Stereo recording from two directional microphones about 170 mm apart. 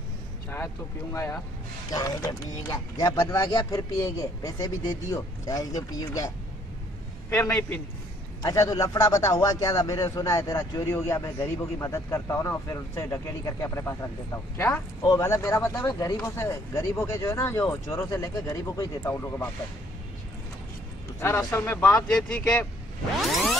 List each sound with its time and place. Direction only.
1.1 s a man's voice: 15° left (ahead or behind)
21.2 s speech: 15° left (ahead or behind)
23.2 s music: centre (ahead or behind)